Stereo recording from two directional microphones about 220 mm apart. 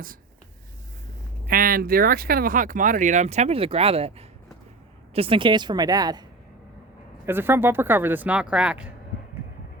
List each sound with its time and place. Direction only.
1.5 s a woman's voice: 40° right (ahead or behind); by 6.2 s 20° right (ahead or behind)
7.3 s speech: 10° right (ahead or behind)